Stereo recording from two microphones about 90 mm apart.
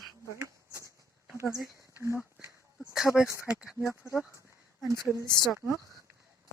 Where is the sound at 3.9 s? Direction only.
30° left (ahead or behind).